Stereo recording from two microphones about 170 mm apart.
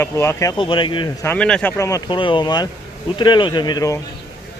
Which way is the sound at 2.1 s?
30° left (ahead or behind).